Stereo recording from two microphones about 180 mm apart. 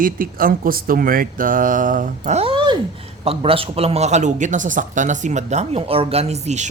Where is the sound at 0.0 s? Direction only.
50° right (ahead or behind).